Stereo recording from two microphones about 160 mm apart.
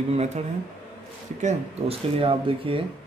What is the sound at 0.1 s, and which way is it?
Speech, 40° right (ahead or behind).